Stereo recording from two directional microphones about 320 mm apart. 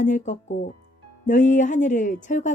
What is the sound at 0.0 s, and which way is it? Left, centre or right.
A woman's voice, left.